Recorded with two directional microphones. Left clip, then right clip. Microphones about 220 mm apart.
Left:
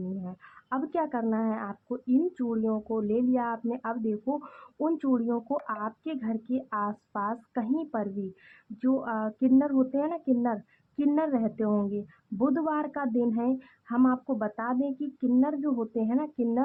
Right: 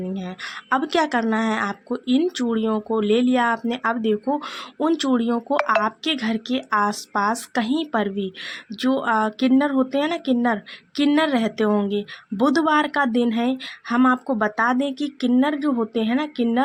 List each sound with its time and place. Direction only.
0.3 s speech: 35° right (ahead or behind)